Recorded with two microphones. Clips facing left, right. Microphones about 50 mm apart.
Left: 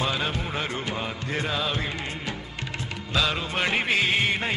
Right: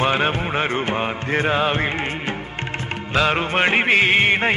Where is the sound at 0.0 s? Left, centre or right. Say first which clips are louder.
Right 8 dB; right.